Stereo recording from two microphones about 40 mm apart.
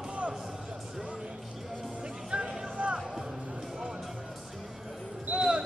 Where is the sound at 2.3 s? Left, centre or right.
Right.